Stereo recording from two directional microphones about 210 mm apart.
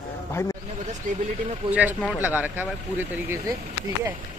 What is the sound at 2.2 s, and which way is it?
Speech, 10° right (ahead or behind).